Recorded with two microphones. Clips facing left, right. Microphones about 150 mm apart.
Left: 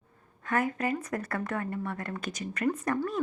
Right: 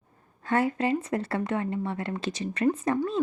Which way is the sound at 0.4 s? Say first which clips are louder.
Right 4 dB; 30° right (ahead or behind).